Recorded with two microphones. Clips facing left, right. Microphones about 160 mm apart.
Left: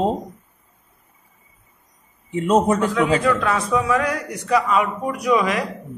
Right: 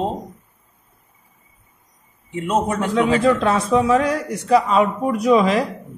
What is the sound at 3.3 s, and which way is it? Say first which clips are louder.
A man's voice: right 3 dB; 25° right (ahead or behind).